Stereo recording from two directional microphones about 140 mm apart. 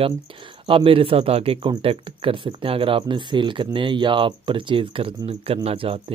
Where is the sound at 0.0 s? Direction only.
40° right (ahead or behind).